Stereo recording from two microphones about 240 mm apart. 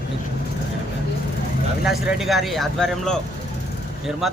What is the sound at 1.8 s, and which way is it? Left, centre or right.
Speech, centre.